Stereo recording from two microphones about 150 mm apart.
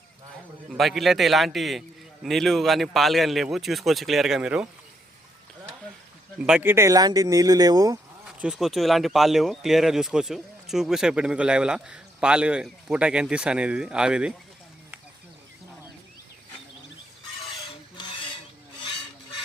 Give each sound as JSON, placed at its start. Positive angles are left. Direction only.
{"t": 0.7, "sound": "speech", "side_deg": 0}
{"t": 6.4, "sound": "speech", "side_deg": -10}
{"t": 8.4, "sound": "speech", "side_deg": -5}
{"t": 17.9, "sound": "cutlery", "side_deg": 30}